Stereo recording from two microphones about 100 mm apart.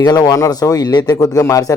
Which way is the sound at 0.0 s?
40° left (ahead or behind).